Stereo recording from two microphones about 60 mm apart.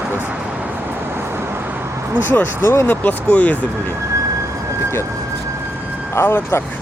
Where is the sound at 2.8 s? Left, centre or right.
Left.